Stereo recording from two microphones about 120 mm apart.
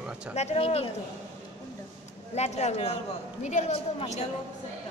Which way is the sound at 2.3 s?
65° left (ahead or behind).